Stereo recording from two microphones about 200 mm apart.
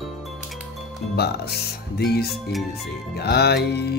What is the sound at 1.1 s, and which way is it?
Speech, 55° left (ahead or behind).